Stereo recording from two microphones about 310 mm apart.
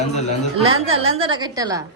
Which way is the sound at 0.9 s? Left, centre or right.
Centre.